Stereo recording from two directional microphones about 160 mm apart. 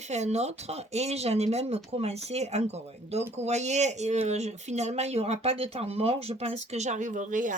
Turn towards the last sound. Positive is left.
turn(degrees=-55)  # may be behind; listen again after turning